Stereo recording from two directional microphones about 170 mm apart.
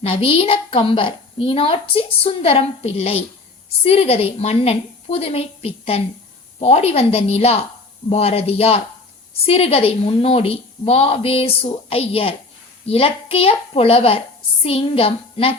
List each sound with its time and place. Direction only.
0.0 s a woman's voice: 35° left (ahead or behind)